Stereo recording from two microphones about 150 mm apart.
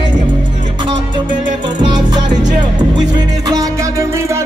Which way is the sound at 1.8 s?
30° right (ahead or behind).